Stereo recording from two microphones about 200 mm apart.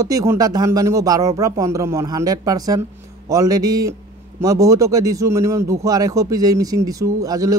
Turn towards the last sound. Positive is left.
turn(degrees=-15)  # may be behind; listen again after turning